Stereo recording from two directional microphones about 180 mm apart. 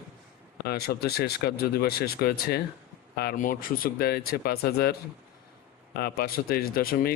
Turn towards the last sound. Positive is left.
turn(degrees=55)  # may be behind; listen again after turning